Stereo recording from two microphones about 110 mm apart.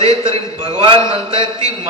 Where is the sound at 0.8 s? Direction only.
50° right (ahead or behind).